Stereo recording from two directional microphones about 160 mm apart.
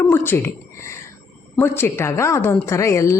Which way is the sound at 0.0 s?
15° left (ahead or behind).